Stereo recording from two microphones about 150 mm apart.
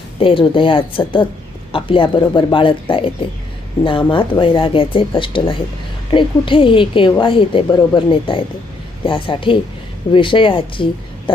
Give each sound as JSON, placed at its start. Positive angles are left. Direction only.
{"t": 0.2, "sound": "a woman's voice", "side_deg": 35}